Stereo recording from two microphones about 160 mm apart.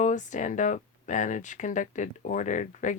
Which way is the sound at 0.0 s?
50° left (ahead or behind).